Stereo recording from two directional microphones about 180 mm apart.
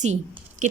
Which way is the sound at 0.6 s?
45° right (ahead or behind).